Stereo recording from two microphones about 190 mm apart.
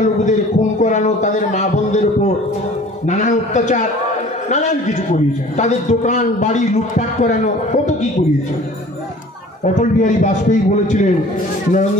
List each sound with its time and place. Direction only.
0.0 s a man's voice: 40° left (ahead or behind)
9.8 s a man's voice: 40° left (ahead or behind)